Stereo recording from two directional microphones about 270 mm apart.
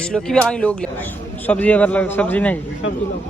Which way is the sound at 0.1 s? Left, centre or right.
Centre.